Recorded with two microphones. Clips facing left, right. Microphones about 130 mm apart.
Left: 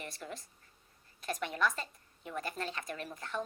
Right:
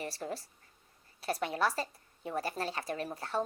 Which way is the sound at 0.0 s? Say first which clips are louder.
Right 6 dB; 35° right (ahead or behind).